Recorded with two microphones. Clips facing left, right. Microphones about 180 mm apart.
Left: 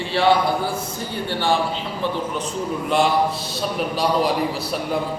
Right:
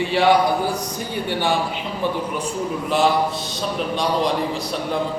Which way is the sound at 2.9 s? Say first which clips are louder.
Even; centre (ahead or behind).